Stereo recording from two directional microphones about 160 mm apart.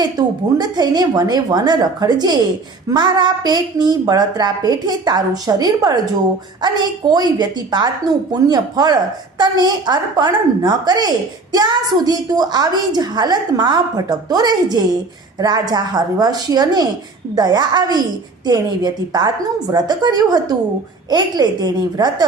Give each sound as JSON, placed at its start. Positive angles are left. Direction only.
{"t": 0.0, "sound": "a woman's voice", "side_deg": -25}